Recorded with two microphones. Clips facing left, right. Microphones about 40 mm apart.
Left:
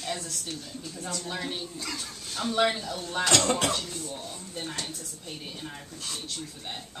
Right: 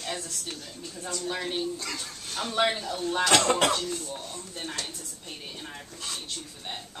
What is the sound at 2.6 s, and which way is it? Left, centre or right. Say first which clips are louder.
Speech: right 1 dB; centre.